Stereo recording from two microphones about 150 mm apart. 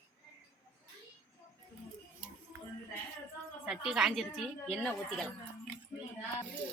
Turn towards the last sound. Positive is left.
turn(degrees=5)  # may be behind; listen again after turning